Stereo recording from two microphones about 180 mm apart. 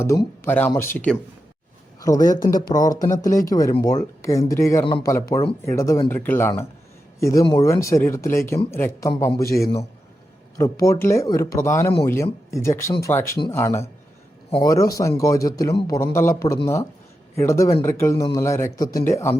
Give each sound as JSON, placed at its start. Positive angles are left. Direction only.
{"t": 0.0, "sound": "speech", "side_deg": 15}
{"t": 2.0, "sound": "a man's voice", "side_deg": 20}